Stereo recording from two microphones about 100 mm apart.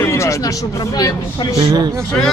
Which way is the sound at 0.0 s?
30° left (ahead or behind).